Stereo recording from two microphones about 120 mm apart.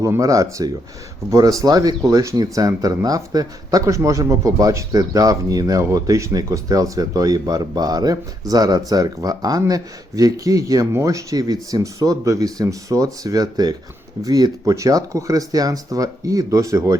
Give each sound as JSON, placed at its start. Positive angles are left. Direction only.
{"t": 0.0, "sound": "speech", "side_deg": -25}